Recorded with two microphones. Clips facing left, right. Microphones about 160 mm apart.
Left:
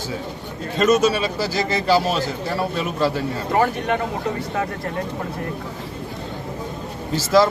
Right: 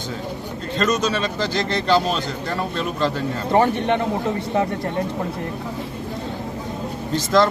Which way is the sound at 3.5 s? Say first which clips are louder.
Right 2 dB; 25° right (ahead or behind).